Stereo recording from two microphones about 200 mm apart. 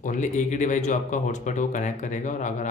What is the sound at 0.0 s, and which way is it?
A man's voice, 40° left (ahead or behind).